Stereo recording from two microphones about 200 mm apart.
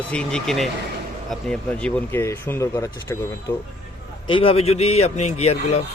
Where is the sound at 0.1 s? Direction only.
5° left (ahead or behind).